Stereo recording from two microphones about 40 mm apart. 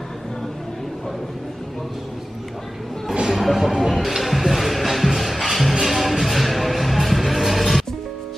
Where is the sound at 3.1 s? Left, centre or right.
Centre.